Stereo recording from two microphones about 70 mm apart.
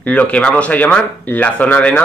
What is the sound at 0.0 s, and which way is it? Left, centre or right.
Speech, centre.